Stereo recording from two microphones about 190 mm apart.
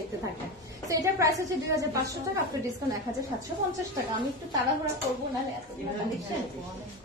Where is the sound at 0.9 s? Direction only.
15° right (ahead or behind).